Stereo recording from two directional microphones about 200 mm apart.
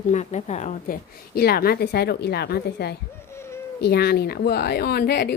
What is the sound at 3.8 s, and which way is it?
Speech, 50° left (ahead or behind).